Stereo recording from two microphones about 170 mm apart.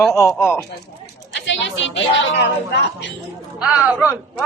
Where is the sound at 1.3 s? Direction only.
90° left.